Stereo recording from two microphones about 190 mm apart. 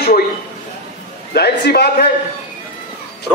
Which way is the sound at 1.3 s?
60° left (ahead or behind).